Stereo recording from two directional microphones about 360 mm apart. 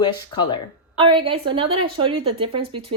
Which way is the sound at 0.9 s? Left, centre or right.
Centre.